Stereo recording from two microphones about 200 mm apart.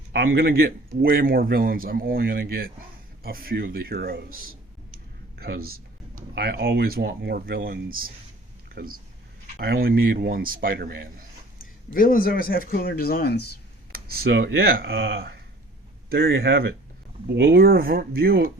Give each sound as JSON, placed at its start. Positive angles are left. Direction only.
{"t": 0.1, "sound": "speech", "side_deg": -50}
{"t": 5.4, "sound": "speech", "side_deg": -50}
{"t": 11.6, "sound": "speech", "side_deg": 45}
{"t": 13.9, "sound": "speech", "side_deg": -50}